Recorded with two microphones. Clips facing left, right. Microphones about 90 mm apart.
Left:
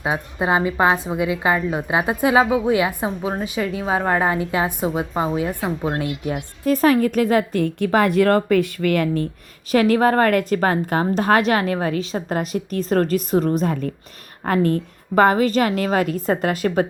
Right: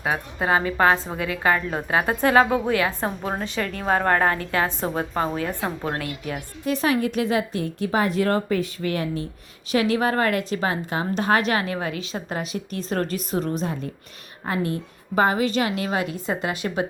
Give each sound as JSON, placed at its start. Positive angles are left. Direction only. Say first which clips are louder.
{"t": 0.0, "sound": "a woman's voice", "louder": "left 2 dB", "side_deg": 20}
{"t": 6.0, "sound": "speech", "louder": "left 6 dB", "side_deg": 25}
{"t": 6.7, "sound": "a woman's voice", "louder": "left 6 dB", "side_deg": 40}
{"t": 9.7, "sound": "a woman's voice", "louder": "left 5 dB", "side_deg": 45}